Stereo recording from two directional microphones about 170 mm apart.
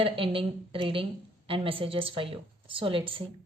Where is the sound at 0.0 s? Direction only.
30° right (ahead or behind).